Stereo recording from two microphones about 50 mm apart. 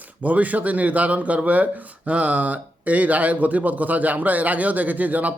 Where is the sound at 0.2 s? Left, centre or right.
Right.